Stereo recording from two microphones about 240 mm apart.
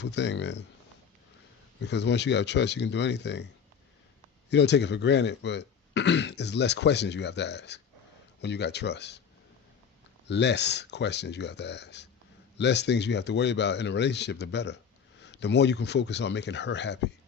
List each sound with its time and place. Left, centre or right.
0.0 s speech: left
1.8 s speech: left
10.2 s speech: left